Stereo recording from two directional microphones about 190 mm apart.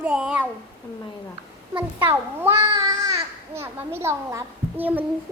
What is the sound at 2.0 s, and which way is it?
A child's voice, 10° right (ahead or behind).